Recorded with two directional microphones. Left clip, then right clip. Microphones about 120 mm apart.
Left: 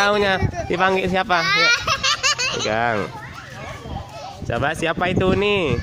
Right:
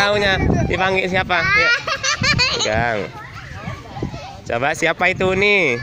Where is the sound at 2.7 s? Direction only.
30° left (ahead or behind).